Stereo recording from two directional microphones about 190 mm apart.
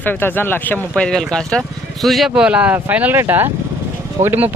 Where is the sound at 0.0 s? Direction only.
10° left (ahead or behind).